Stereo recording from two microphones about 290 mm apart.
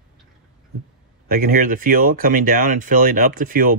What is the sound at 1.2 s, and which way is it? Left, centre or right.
Speech, right.